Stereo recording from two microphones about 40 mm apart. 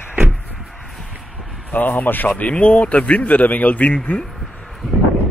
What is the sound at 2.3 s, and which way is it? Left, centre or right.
Speech, left.